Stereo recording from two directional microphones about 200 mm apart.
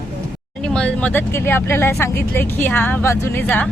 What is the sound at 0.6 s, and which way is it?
Speech, 5° left (ahead or behind).